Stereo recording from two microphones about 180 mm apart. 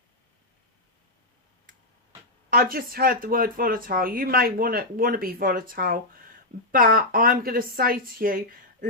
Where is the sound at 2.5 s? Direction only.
55° right (ahead or behind).